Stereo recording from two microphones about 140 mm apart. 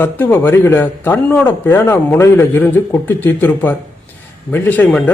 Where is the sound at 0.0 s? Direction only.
15° left (ahead or behind).